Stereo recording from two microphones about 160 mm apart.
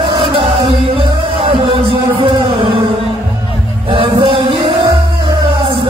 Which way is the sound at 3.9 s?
35° right (ahead or behind).